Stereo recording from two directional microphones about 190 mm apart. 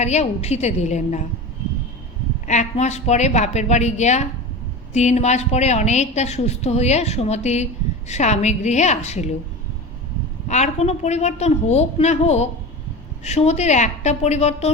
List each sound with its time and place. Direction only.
0.0 s a woman's voice: 35° left (ahead or behind)
2.5 s a woman's voice: 40° left (ahead or behind)
10.5 s a woman's voice: 35° left (ahead or behind)